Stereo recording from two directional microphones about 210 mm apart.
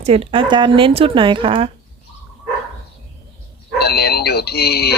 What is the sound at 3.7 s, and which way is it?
Speech, 50° left (ahead or behind).